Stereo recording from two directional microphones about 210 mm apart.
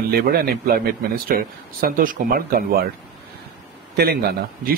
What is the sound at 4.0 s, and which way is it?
Speech, 50° right (ahead or behind).